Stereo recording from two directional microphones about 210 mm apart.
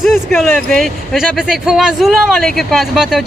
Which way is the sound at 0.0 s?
Centre (ahead or behind).